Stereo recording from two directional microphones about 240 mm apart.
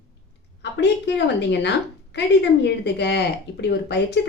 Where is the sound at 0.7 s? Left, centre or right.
Left.